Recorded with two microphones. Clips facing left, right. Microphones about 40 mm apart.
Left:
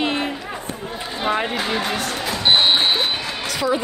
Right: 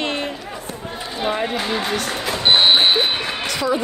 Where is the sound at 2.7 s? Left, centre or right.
Right.